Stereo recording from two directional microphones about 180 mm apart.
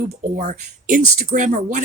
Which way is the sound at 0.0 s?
45° right (ahead or behind).